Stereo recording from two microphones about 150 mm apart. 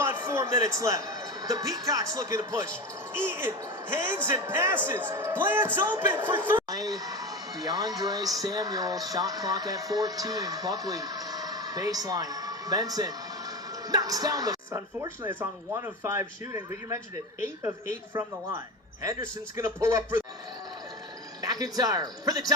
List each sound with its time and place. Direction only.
0.0 s music: 20° right (ahead or behind)
1.9 s speech: 25° right (ahead or behind)
3.2 s a man's voice: 15° right (ahead or behind)
6.6 s speech: 25° right (ahead or behind)
15.3 s a man's voice: 15° right (ahead or behind)
18.1 s a man's voice: 10° right (ahead or behind)
21.4 s speech: 25° right (ahead or behind)